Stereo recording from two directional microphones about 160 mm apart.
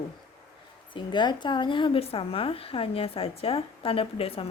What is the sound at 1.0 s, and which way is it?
A woman's voice, 30° left (ahead or behind).